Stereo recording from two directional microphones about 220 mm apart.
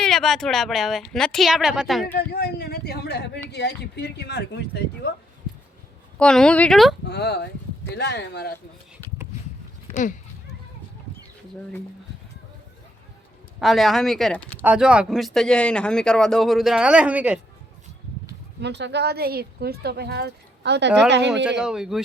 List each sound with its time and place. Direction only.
0.0 s speech: centre (ahead or behind)
2.1 s speech: 45° left (ahead or behind)
6.1 s speech: 5° left (ahead or behind)
7.1 s speech: 50° left (ahead or behind)
9.9 s speech: 35° left (ahead or behind)
13.6 s speech: centre (ahead or behind)
14.6 s speech: 5° right (ahead or behind)
18.6 s speech: 50° right (ahead or behind)
21.6 s speech: centre (ahead or behind)